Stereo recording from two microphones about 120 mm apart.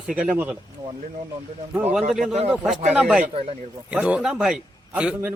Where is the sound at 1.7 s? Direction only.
15° right (ahead or behind).